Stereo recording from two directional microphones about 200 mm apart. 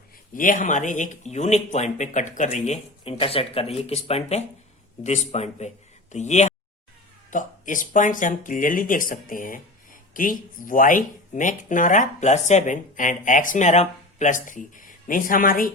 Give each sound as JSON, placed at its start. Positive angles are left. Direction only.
{"t": 0.3, "sound": "speech", "side_deg": 40}